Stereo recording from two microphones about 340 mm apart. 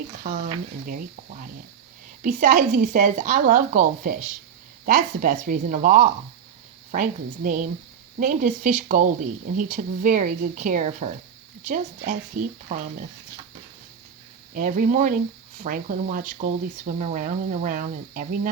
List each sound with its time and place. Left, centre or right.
0.2 s speech: right
14.5 s speech: right